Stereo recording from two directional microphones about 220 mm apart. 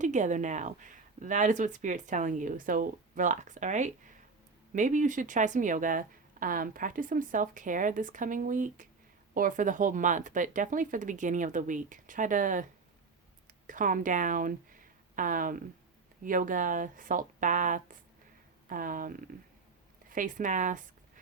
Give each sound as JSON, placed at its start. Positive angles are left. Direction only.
{"t": 0.0, "sound": "speech", "side_deg": -35}
{"t": 13.7, "sound": "speech", "side_deg": -35}